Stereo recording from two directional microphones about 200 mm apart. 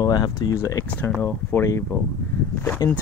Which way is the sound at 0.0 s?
20° left (ahead or behind).